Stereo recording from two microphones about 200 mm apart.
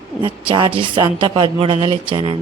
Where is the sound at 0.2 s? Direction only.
25° right (ahead or behind).